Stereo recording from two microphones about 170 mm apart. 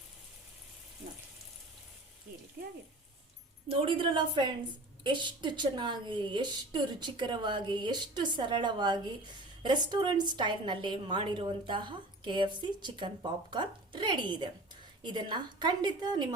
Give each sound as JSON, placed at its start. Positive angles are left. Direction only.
{"t": 3.7, "sound": "a woman's voice", "side_deg": -30}